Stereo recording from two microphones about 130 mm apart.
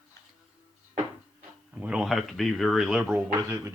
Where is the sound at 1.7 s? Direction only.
5° right (ahead or behind).